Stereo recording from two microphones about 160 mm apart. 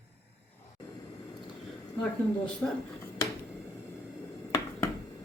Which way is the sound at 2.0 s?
5° left (ahead or behind).